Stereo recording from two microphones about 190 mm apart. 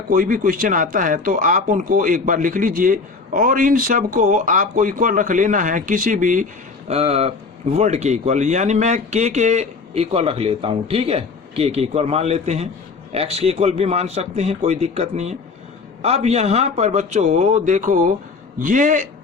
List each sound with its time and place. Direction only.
0.1 s speech: 45° right (ahead or behind)
6.8 s speech: 35° right (ahead or behind)